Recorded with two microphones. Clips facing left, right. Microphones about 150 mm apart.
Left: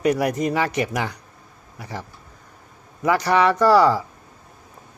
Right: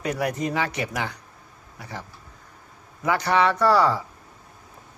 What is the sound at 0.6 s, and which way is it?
Speech, 35° left (ahead or behind).